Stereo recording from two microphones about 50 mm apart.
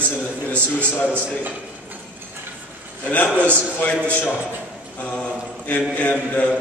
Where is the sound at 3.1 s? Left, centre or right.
Left.